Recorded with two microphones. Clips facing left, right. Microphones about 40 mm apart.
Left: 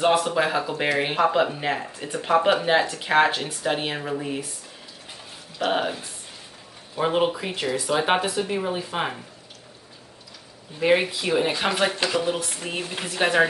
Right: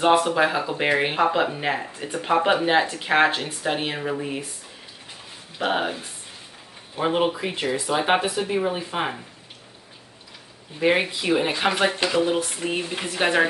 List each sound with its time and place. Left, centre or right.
0.3 s speech: centre
5.7 s speech: centre
7.5 s speech: centre
7.8 s speech: centre
10.8 s speech: centre